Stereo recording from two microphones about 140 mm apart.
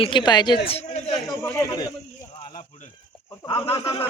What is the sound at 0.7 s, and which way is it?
Speech, 45° left (ahead or behind).